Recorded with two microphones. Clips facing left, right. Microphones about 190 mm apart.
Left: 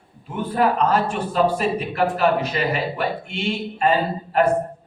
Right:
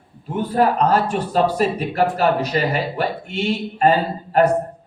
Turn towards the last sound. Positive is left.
turn(degrees=-40)  # may be behind; listen again after turning